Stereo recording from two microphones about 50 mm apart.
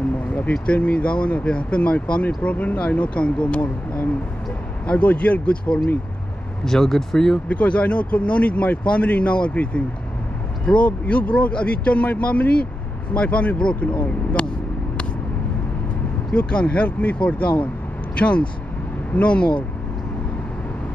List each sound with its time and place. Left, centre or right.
0.3 s speech: left
6.6 s speech: centre
7.4 s speech: left
14.4 s speech: centre
16.3 s speech: left